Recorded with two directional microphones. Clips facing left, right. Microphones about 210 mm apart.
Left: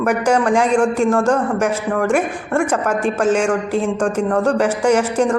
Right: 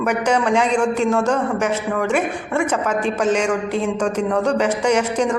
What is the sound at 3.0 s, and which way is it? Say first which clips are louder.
A woman's voice: left 3 dB; 5° left (ahead or behind).